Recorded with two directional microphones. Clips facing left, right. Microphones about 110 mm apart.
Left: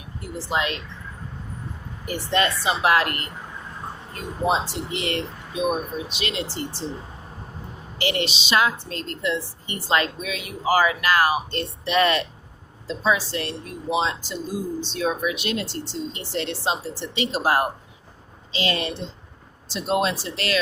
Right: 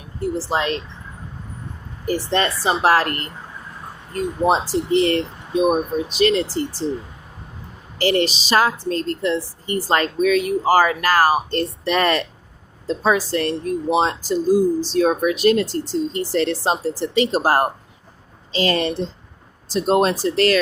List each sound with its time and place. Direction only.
0.2 s a woman's voice: 35° right (ahead or behind)
2.0 s a woman's voice: 35° right (ahead or behind)
7.9 s a woman's voice: 40° right (ahead or behind)